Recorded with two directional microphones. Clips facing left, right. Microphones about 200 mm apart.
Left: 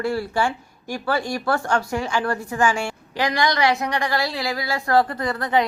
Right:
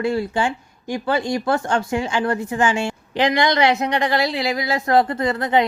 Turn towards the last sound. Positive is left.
turn(degrees=-25)  # may be behind; listen again after turning